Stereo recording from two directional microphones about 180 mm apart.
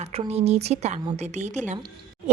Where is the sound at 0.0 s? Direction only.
35° right (ahead or behind).